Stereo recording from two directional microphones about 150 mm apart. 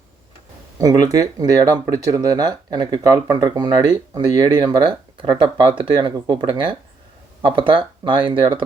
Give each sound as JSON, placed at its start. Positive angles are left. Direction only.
{"t": 0.8, "sound": "speech", "side_deg": -25}